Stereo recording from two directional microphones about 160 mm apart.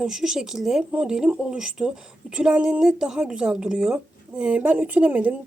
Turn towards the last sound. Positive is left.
turn(degrees=-10)  # may be behind; listen again after turning